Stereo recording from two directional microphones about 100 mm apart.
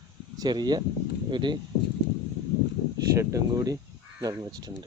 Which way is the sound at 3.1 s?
35° right (ahead or behind).